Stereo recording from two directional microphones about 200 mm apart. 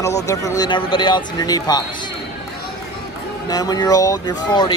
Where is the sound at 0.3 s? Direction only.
15° left (ahead or behind).